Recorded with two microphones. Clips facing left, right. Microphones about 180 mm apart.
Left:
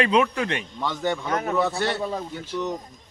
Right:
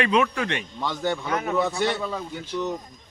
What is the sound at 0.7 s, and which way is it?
Speech, 10° right (ahead or behind).